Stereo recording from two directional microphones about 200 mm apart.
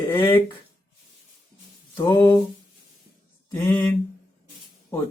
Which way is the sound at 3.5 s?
15° left (ahead or behind).